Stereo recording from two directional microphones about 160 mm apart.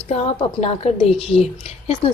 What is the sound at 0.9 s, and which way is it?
Speech, 40° left (ahead or behind).